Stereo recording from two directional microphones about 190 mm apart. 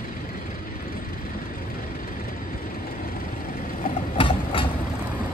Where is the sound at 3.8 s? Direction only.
30° left (ahead or behind).